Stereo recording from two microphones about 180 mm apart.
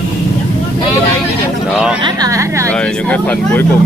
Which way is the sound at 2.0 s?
20° right (ahead or behind).